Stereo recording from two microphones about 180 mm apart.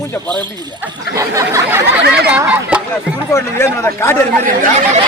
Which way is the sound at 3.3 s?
15° left (ahead or behind).